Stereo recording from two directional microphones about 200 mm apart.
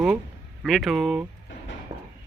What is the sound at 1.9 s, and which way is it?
Clip-clop, 20° right (ahead or behind).